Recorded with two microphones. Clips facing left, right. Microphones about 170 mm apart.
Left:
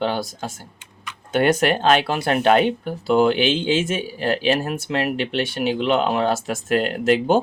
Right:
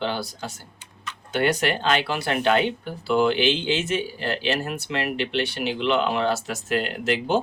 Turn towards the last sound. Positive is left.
turn(degrees=50)  # may be behind; listen again after turning